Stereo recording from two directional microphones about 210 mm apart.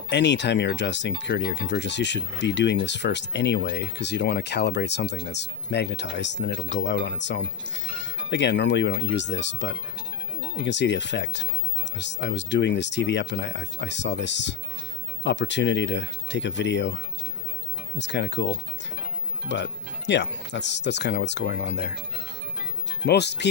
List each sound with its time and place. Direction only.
0.1 s speech: 55° left (ahead or behind)
23.0 s speech: 55° left (ahead or behind)